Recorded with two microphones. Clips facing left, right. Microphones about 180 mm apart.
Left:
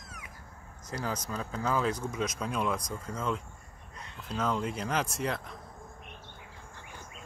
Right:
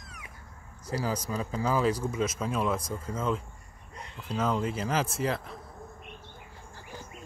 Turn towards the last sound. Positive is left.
turn(degrees=-5)  # may be behind; listen again after turning